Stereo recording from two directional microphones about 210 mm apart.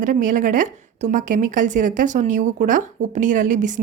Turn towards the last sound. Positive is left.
turn(degrees=-35)  # may be behind; listen again after turning